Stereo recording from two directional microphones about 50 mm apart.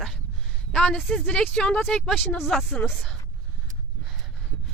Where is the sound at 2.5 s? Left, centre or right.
Centre.